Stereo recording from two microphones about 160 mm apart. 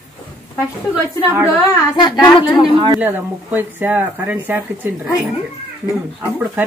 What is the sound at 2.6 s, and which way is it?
Speech, 35° right (ahead or behind).